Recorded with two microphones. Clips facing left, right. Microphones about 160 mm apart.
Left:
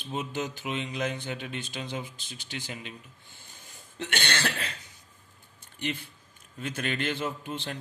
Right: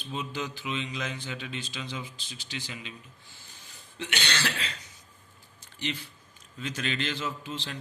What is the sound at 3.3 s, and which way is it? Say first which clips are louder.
Cough: left 1 dB; 50° left (ahead or behind).